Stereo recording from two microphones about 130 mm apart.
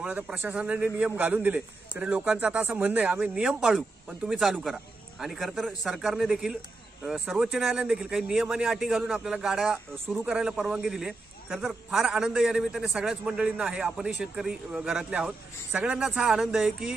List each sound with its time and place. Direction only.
0.0 s a man's voice: 10° right (ahead or behind)